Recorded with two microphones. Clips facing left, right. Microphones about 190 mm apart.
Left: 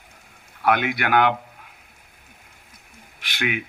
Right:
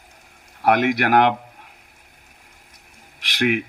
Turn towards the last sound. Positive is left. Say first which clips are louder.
# right 7 dB
turn(degrees=-40)  # may be behind; listen again after turning